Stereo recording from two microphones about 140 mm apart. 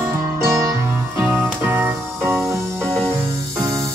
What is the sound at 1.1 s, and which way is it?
Music, 15° right (ahead or behind).